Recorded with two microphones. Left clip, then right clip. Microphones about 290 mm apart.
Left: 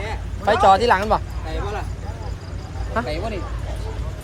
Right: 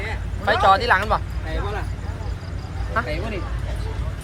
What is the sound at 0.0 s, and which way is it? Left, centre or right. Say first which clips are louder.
Speech: left 2 dB; left.